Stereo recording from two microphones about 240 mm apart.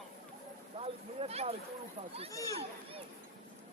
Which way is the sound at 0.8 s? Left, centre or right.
Right.